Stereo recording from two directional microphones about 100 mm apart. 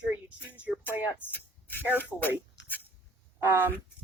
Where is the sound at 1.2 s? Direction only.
20° left (ahead or behind).